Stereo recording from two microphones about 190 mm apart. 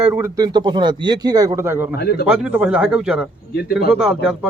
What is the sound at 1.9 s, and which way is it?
Speech, 60° left (ahead or behind).